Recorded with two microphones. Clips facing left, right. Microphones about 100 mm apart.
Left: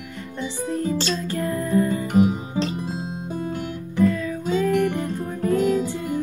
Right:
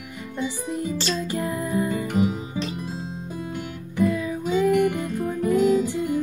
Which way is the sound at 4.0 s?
15° right (ahead or behind).